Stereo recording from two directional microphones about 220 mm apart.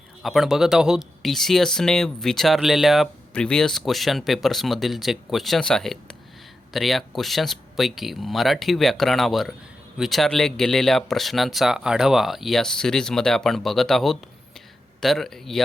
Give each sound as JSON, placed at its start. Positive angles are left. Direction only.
{"t": 0.2, "sound": "speech", "side_deg": 0}